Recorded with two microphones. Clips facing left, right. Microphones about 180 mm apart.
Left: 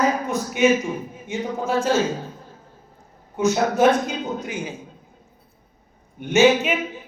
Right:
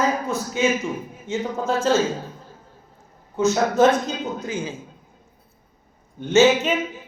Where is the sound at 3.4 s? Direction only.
10° left (ahead or behind).